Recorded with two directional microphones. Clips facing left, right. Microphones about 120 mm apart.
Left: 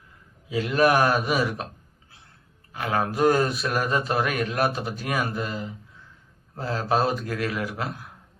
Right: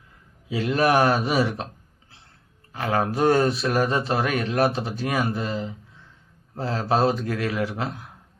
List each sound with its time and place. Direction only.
0.4 s speech: 30° right (ahead or behind)
2.7 s speech: 30° right (ahead or behind)